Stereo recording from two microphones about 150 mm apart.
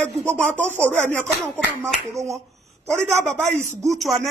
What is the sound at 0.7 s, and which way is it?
Speech, 15° right (ahead or behind).